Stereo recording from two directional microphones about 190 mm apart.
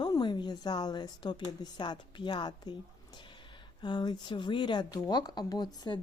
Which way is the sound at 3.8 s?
20° left (ahead or behind).